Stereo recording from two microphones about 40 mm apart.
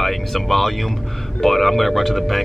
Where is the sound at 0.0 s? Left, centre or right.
Centre.